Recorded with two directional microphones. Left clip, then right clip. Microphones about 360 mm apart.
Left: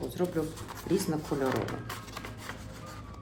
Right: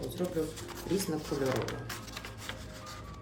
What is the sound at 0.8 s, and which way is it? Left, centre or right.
Speech, centre.